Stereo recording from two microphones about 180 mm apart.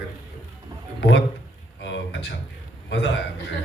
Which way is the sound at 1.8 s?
80° left.